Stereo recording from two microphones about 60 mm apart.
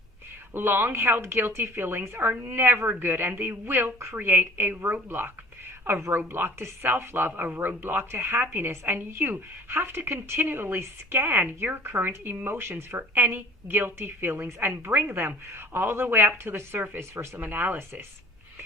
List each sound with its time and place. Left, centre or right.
0.5 s speech: right